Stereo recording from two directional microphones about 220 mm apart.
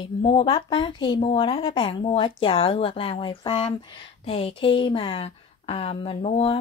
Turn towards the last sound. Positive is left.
turn(degrees=30)  # may be behind; listen again after turning